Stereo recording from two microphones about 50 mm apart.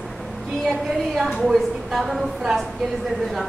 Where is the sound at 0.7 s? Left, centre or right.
Centre.